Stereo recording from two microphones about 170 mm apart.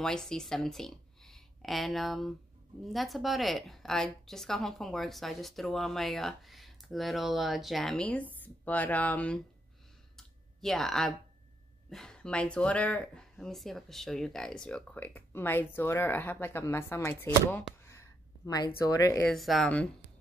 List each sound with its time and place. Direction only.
0.0 s a woman's voice: 5° left (ahead or behind)
10.1 s clicking: centre (ahead or behind)
11.9 s speech: 5° left (ahead or behind)
17.8 s a sound: 15° left (ahead or behind)
18.9 s speech: 20° left (ahead or behind)
19.2 s a woman's voice: centre (ahead or behind)